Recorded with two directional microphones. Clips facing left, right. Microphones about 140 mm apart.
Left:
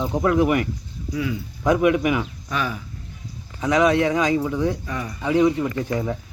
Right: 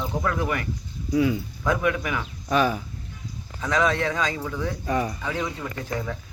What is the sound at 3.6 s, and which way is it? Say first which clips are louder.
Speech: left 5 dB; 15° left (ahead or behind).